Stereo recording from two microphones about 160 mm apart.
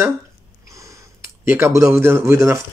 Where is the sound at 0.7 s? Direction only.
20° right (ahead or behind).